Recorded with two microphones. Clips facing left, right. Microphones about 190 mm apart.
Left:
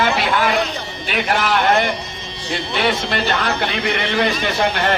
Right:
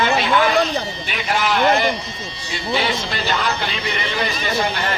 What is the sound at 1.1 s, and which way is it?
Speech, 55° left (ahead or behind).